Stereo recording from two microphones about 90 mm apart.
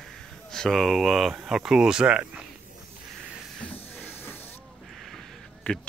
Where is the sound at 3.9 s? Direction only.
25° left (ahead or behind).